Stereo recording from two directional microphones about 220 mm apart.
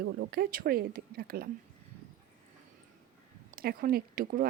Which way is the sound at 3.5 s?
40° right (ahead or behind).